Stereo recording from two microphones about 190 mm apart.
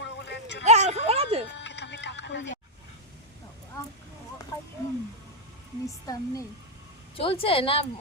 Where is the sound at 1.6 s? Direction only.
65° left (ahead or behind).